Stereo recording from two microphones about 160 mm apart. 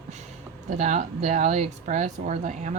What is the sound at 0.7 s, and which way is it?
Speech, 50° right (ahead or behind).